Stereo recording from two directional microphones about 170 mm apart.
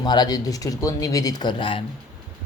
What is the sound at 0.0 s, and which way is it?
A man's voice, 25° left (ahead or behind).